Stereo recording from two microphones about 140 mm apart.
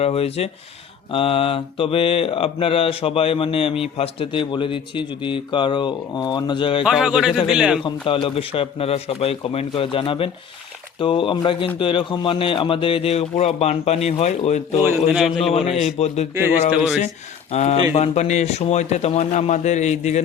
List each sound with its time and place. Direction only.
0.0 s a man's voice: 45° left (ahead or behind)
1.1 s mantra: 40° left (ahead or behind)
6.8 s speech: 5° right (ahead or behind)
7.9 s mantra: 40° left (ahead or behind)
11.8 s a man's voice: 35° left (ahead or behind); by 14.8 s 55° left (ahead or behind)
15.1 s speech: centre (ahead or behind)
16.0 s a man's voice: 45° left (ahead or behind)
17.5 s a man's voice: 50° left (ahead or behind)